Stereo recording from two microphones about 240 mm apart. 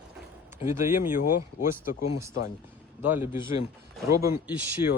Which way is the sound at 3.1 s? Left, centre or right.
Centre.